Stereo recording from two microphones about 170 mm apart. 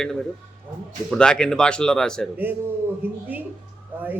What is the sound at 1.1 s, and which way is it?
Speech, 5° left (ahead or behind).